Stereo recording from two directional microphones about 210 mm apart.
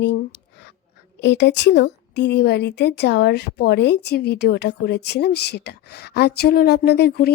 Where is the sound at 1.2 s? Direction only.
55° left (ahead or behind).